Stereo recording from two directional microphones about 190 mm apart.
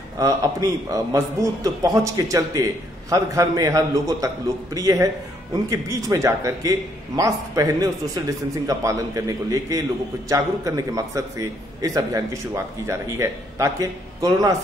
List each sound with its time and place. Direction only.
0.2 s a man's voice: 20° right (ahead or behind)